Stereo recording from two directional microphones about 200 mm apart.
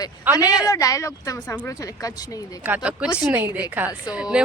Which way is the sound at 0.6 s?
15° left (ahead or behind).